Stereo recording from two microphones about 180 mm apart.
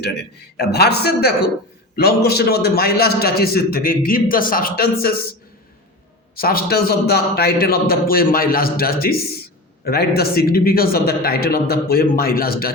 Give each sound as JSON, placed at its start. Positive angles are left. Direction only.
{"t": 0.0, "sound": "a man's voice", "side_deg": 65}
{"t": 6.3, "sound": "a man's voice", "side_deg": 55}